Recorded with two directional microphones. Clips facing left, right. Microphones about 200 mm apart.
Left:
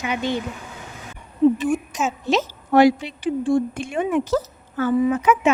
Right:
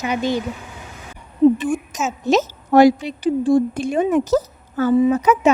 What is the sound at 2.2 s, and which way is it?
A woman's voice, 45° right (ahead or behind).